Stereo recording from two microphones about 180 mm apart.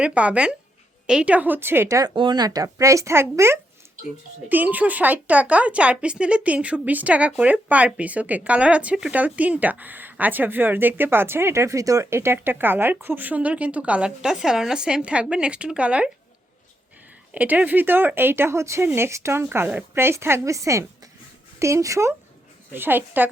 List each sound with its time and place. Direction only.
0.0 s speech: 5° right (ahead or behind)
17.3 s speech: 10° right (ahead or behind)